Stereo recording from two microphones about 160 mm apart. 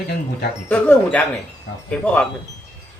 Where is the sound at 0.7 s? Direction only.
10° left (ahead or behind).